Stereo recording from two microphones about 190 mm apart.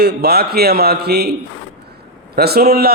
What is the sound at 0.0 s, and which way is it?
A man's voice, 55° right (ahead or behind).